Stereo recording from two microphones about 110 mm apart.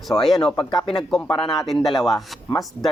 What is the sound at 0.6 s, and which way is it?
Speech, 45° left (ahead or behind).